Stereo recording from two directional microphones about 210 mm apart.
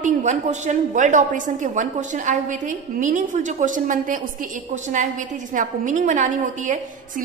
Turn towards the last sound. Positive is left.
turn(degrees=-35)  # may be behind; listen again after turning